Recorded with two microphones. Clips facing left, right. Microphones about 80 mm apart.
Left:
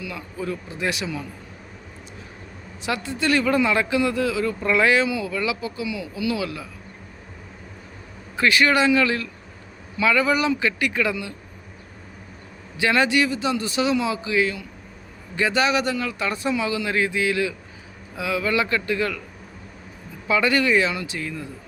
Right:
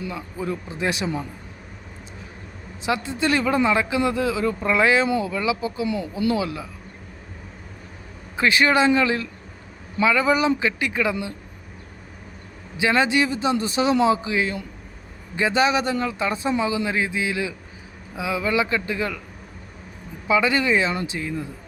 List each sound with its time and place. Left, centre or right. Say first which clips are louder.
0.0 s speech: right 1 dB; right
2.8 s speech: right 1 dB; right
5.8 s speech: right 3 dB; right
6.4 s speech: right 1 dB; right
8.4 s speech: even; right
12.7 s a man's voice: even; right
14.2 s speech: left 2 dB; right
20.2 s speech: even; centre